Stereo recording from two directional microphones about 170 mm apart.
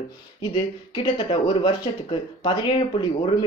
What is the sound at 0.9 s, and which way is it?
Speech, 30° left (ahead or behind).